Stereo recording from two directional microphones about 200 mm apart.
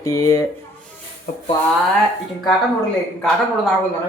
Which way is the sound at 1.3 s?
40° left (ahead or behind).